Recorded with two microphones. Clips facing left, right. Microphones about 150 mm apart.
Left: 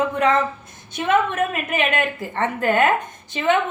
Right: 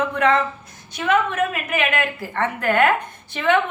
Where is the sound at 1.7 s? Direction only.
20° left (ahead or behind).